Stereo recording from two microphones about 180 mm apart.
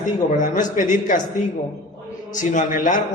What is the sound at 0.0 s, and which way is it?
A man's voice, 45° left (ahead or behind).